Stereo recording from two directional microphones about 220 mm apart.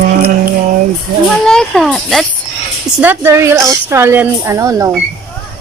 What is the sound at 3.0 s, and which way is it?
Speech, 10° right (ahead or behind).